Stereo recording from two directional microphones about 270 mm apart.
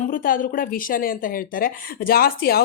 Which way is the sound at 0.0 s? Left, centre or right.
Left.